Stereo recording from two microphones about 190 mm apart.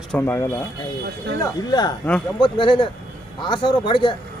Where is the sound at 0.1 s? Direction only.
10° left (ahead or behind).